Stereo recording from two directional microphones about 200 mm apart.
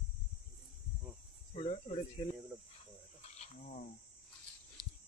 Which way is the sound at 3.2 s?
35° left (ahead or behind).